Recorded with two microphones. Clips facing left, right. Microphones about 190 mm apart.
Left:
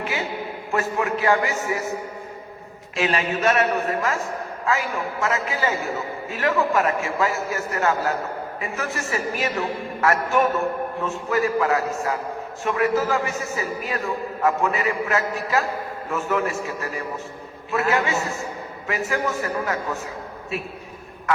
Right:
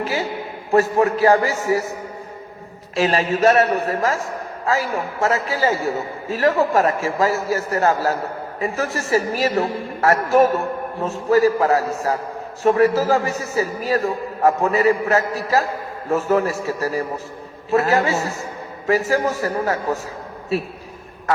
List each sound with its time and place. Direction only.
0.0 s a man's voice: 35° right (ahead or behind)
2.9 s a man's voice: 35° right (ahead or behind)